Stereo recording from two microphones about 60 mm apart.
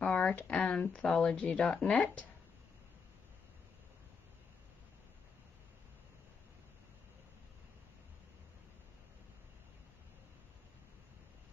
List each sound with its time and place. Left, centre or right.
0.2 s speech: left